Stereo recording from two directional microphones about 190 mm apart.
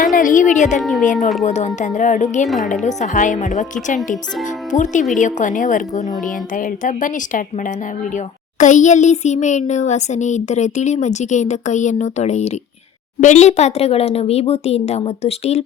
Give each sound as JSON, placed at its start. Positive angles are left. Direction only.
{"t": 0.0, "sound": "a woman's voice", "side_deg": 45}
{"t": 0.8, "sound": "speech", "side_deg": 0}
{"t": 1.5, "sound": "a child's voice", "side_deg": 35}